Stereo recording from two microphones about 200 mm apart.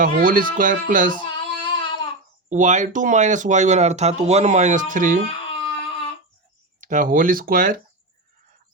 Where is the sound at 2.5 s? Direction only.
40° right (ahead or behind).